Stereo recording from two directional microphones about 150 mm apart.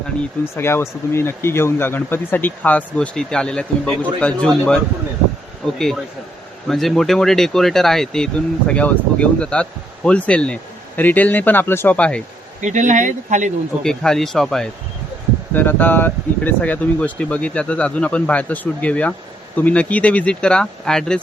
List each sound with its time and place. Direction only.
0.5 s speech: 15° left (ahead or behind)
12.6 s speech: 55° right (ahead or behind)
13.8 s speech: 5° left (ahead or behind)
15.5 s speech: 15° left (ahead or behind)